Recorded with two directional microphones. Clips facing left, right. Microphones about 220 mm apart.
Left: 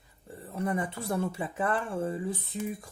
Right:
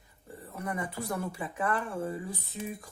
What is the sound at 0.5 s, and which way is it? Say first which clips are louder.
Speech: left 4 dB; 25° left (ahead or behind).